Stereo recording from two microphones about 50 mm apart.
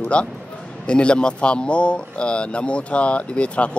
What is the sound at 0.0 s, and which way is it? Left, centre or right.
Speech, left.